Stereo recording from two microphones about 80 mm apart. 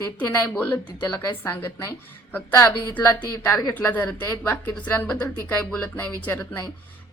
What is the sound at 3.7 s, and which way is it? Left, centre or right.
Speech, left.